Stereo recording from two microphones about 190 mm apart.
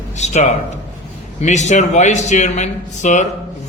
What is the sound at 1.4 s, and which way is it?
A man's voice, 35° left (ahead or behind).